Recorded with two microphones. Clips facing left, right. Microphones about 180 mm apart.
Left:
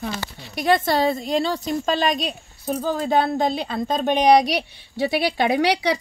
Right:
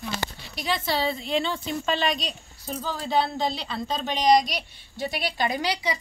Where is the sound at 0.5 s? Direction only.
50° left (ahead or behind).